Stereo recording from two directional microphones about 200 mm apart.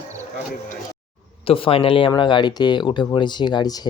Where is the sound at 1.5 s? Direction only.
30° left (ahead or behind).